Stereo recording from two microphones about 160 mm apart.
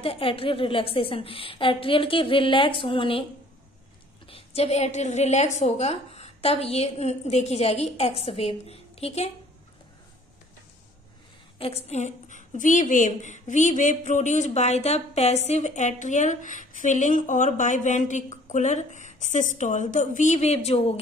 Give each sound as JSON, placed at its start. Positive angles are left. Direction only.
{"t": 0.0, "sound": "a woman's voice", "side_deg": 35}
{"t": 4.3, "sound": "a woman's voice", "side_deg": 40}
{"t": 11.5, "sound": "a woman's voice", "side_deg": 35}